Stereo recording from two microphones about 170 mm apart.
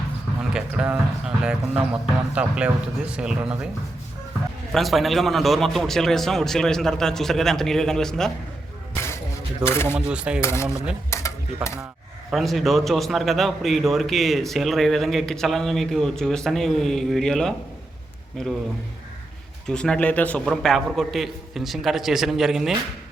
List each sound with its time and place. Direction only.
0.5 s a man's voice: 5° right (ahead or behind)
4.7 s a man's voice: centre (ahead or behind)
9.6 s speech: 15° left (ahead or behind)
9.9 s speech: 5° right (ahead or behind)
10.4 s speech: 15° left (ahead or behind)
11.1 s dishes: 15° left (ahead or behind)
12.3 s a man's voice: centre (ahead or behind)
19.6 s a man's voice: 5° left (ahead or behind)